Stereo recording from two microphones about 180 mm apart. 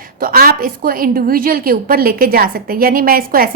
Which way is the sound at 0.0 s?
55° right (ahead or behind).